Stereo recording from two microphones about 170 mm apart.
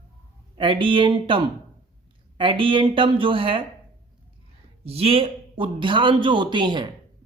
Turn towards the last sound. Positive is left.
turn(degrees=-25)  # may be behind; listen again after turning